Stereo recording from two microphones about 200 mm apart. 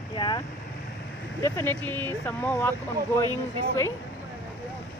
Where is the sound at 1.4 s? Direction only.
10° left (ahead or behind).